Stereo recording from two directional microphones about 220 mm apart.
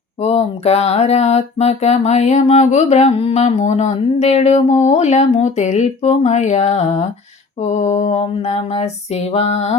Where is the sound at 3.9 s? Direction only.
30° left (ahead or behind).